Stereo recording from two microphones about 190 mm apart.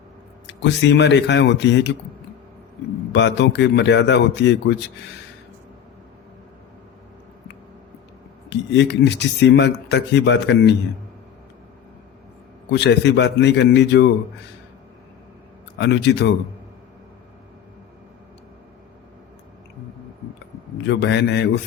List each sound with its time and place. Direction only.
0.4 s speech: 70° left (ahead or behind)
3.1 s a man's voice: 65° left (ahead or behind)
8.4 s a man's voice: 65° left (ahead or behind)
12.7 s a man's voice: 65° left (ahead or behind)
15.8 s a man's voice: 60° left (ahead or behind)
20.8 s a man's voice: 65° left (ahead or behind)